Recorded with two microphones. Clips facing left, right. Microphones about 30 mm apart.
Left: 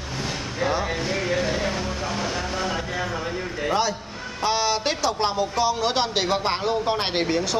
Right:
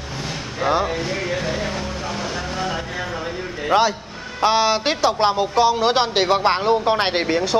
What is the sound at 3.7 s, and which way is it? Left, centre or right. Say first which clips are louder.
A man's voice: right 7 dB; right.